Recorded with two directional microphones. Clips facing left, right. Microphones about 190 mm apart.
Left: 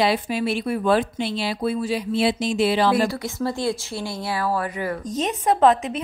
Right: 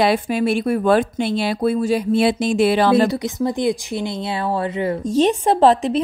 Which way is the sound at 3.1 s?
20° right (ahead or behind).